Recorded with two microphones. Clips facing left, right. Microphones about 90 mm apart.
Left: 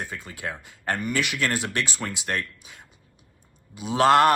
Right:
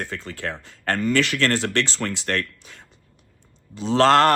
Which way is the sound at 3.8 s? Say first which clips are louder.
Right 2 dB; 15° left (ahead or behind).